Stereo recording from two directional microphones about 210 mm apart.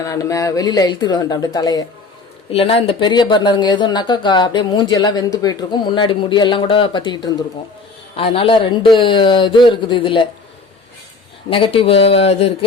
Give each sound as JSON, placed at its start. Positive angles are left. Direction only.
{"t": 0.0, "sound": "speech", "side_deg": 15}
{"t": 11.4, "sound": "speech", "side_deg": 25}